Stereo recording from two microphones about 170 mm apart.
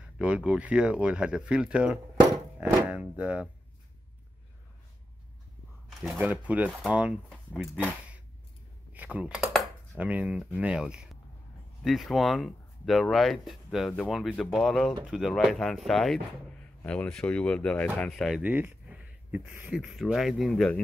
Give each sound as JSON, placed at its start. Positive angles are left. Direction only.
{"t": 0.2, "sound": "speech", "side_deg": -5}
{"t": 5.9, "sound": "speech", "side_deg": 0}
{"t": 8.9, "sound": "speech", "side_deg": -10}
{"t": 18.4, "sound": "speech", "side_deg": -10}